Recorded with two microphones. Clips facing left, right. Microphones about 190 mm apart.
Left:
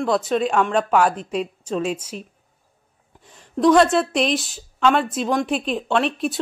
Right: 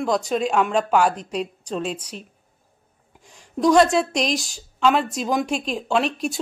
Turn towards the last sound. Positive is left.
turn(degrees=0)  # may be behind; listen again after turning